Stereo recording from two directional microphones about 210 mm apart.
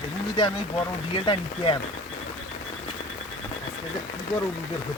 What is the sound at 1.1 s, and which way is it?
Speech, 25° left (ahead or behind).